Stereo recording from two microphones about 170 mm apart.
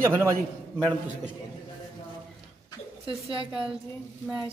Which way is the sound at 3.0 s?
30° right (ahead or behind).